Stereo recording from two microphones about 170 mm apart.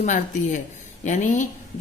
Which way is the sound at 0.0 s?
50° left (ahead or behind).